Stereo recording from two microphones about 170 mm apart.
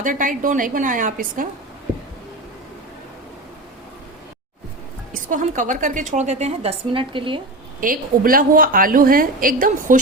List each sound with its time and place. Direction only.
0.0 s a woman's voice: 50° right (ahead or behind)
5.3 s a woman's voice: 50° right (ahead or behind); by 7.4 s 30° right (ahead or behind)
7.8 s a woman's voice: 55° right (ahead or behind)